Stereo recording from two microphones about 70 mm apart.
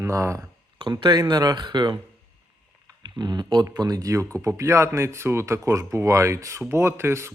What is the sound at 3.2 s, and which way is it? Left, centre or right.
Speech, right.